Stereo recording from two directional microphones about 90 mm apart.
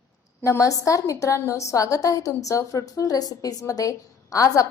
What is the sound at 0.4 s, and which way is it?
A woman's voice, 35° left (ahead or behind).